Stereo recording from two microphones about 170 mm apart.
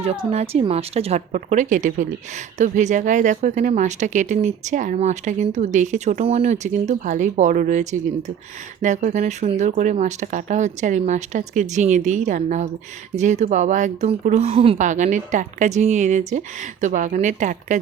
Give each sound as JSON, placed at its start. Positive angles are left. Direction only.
{"t": 0.0, "sound": "a woman's voice", "side_deg": -35}